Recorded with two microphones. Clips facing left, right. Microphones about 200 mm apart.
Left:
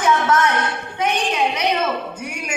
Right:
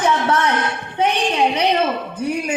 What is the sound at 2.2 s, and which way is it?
Speech, 35° right (ahead or behind).